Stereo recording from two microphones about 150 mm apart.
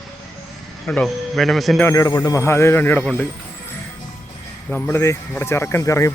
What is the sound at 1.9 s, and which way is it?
Speech, 20° left (ahead or behind).